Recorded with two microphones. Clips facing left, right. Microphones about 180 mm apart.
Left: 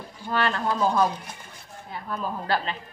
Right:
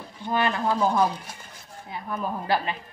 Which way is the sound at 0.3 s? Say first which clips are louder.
Right 1 dB; 15° right (ahead or behind).